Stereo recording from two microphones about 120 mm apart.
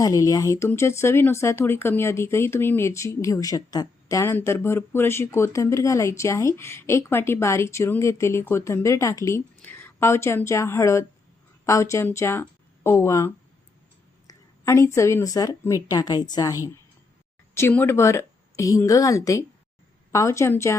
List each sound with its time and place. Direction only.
0.0 s speech: 30° left (ahead or behind)
9.6 s speech: 15° left (ahead or behind)
14.3 s a sound: 25° left (ahead or behind)
14.9 s speech: 25° left (ahead or behind)